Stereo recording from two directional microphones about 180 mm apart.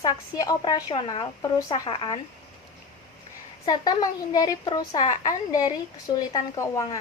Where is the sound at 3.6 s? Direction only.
20° left (ahead or behind).